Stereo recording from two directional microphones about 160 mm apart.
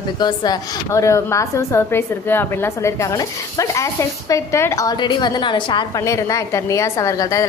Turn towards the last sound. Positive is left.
turn(degrees=20)  # may be behind; listen again after turning